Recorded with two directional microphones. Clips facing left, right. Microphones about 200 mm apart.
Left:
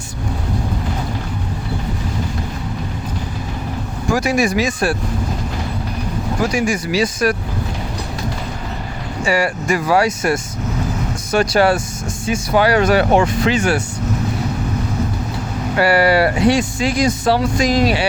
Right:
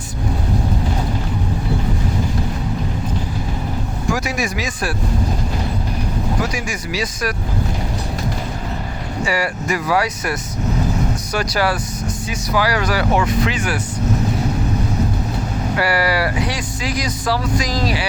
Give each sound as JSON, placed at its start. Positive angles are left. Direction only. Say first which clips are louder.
{"t": 4.1, "sound": "speech", "louder": "left 6 dB", "side_deg": 30}
{"t": 6.7, "sound": "speech", "louder": "left 6 dB", "side_deg": 30}
{"t": 9.2, "sound": "speech", "louder": "left 4 dB", "side_deg": 25}
{"t": 15.8, "sound": "speech", "louder": "left 6 dB", "side_deg": 25}